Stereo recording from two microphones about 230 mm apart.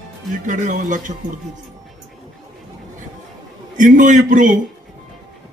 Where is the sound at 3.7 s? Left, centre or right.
Right.